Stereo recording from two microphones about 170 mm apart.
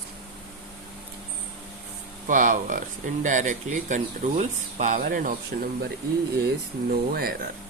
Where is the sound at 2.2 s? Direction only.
50° right (ahead or behind).